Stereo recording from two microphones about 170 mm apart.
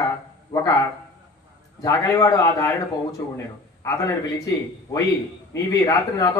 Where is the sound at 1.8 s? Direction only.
20° left (ahead or behind).